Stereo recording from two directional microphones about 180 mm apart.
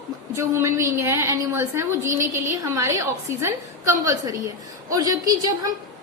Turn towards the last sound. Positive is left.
turn(degrees=-20)  # may be behind; listen again after turning